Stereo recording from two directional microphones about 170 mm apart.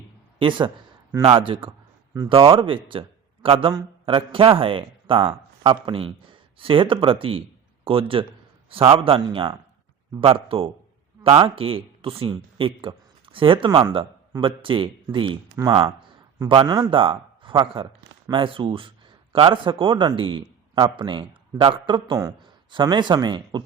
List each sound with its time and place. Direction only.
0.3 s a man's voice: 30° right (ahead or behind)